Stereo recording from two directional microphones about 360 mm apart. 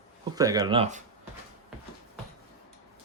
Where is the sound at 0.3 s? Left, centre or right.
Centre.